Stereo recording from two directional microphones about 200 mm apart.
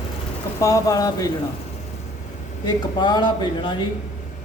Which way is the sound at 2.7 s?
20° left (ahead or behind).